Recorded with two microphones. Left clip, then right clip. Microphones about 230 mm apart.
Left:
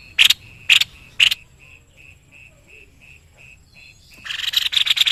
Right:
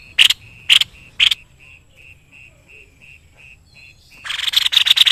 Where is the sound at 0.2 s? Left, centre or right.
Centre.